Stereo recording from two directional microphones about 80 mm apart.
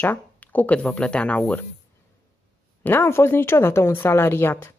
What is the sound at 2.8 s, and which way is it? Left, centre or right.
Speech, left.